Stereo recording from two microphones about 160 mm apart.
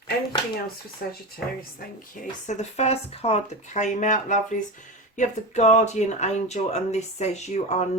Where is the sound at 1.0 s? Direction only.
65° left (ahead or behind).